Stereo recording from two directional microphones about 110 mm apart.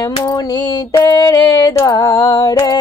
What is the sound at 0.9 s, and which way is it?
Music, 35° left (ahead or behind).